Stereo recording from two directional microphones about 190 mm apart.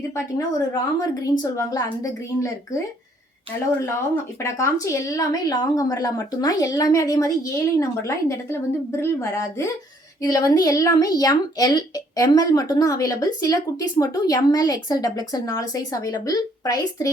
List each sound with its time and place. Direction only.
0.3 s speech: 20° left (ahead or behind)
3.8 s a woman's voice: 15° left (ahead or behind)